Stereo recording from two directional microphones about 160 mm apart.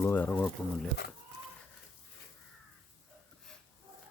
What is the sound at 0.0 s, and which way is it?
Speech, 10° left (ahead or behind).